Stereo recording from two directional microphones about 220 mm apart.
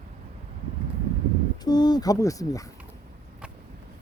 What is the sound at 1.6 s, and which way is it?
Speech, 20° left (ahead or behind).